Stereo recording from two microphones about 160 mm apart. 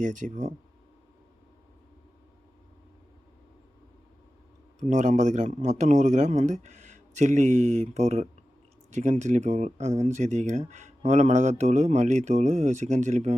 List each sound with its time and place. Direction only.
0.0 s speech: 50° right (ahead or behind)
4.8 s speech: 50° right (ahead or behind)